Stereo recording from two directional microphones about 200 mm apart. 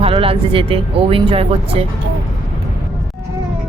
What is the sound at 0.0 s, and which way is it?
Speech, 30° right (ahead or behind).